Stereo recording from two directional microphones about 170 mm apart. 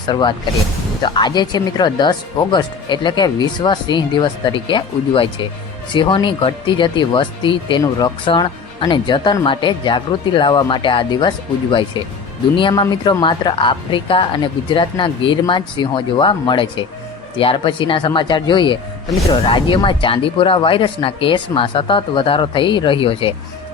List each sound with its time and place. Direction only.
0.1 s speech: 25° left (ahead or behind)